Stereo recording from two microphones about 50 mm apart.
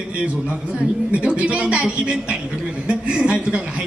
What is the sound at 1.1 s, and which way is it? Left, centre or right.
A man's voice, right.